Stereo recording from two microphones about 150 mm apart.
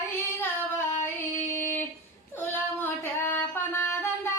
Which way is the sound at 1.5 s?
15° left (ahead or behind).